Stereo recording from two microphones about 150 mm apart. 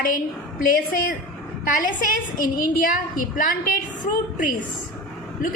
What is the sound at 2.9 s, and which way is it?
Speech, 60° left (ahead or behind).